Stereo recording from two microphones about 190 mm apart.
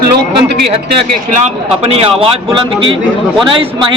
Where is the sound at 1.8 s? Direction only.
30° right (ahead or behind).